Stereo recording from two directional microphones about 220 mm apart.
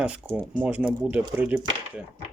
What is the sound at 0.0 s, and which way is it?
Speech, 5° right (ahead or behind).